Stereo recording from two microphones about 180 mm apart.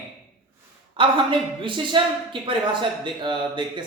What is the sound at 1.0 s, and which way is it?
Speech, 30° right (ahead or behind).